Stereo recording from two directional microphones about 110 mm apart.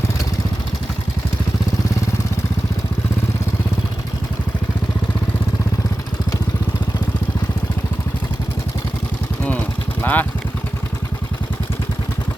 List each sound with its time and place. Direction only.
10.0 s vehicle: 15° left (ahead or behind)